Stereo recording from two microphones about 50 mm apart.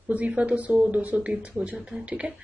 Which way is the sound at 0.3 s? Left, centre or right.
Right.